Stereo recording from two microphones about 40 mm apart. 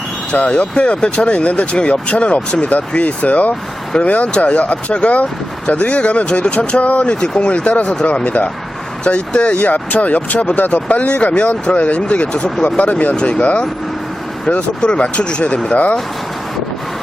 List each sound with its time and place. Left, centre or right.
0.4 s speech: left
7.0 s speech: left
8.0 s speech: left
9.6 s speech: left
12.8 s speech: left
13.1 s speech: left
13.4 s speech: left